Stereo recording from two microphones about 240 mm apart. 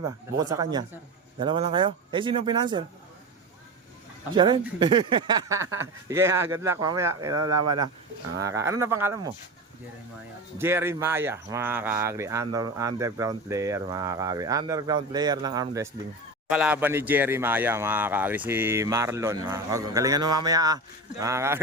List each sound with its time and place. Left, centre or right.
0.0 s speech: centre
4.4 s speech: centre
10.6 s speech: centre
16.5 s speech: centre